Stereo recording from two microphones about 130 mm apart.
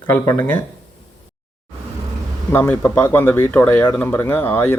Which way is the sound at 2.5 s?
20° left (ahead or behind).